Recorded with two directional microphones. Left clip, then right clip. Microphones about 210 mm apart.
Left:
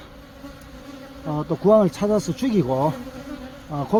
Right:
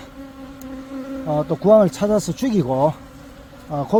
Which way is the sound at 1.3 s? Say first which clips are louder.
Right 3 dB; 40° right (ahead or behind).